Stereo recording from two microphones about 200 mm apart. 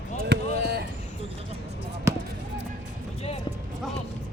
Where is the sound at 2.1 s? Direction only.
15° right (ahead or behind).